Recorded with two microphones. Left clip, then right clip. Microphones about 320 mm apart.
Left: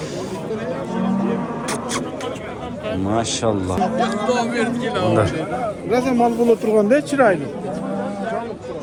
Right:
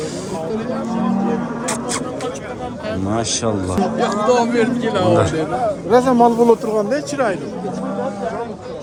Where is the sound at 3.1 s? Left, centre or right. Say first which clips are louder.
Even; centre.